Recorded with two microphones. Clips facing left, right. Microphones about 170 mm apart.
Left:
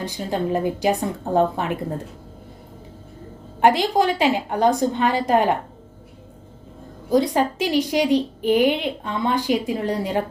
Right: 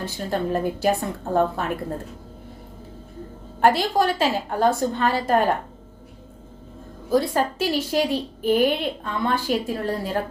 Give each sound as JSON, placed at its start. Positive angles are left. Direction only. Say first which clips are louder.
{"t": 0.0, "sound": "a woman's voice", "louder": "left 1 dB", "side_deg": 15}
{"t": 3.6, "sound": "a woman's voice", "louder": "left 2 dB", "side_deg": 15}
{"t": 7.1, "sound": "a woman's voice", "louder": "left 2 dB", "side_deg": 15}